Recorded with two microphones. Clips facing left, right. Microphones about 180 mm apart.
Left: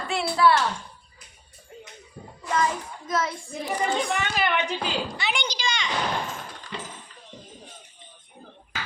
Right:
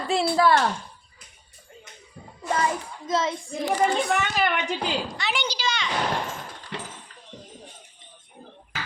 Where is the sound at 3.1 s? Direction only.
25° right (ahead or behind).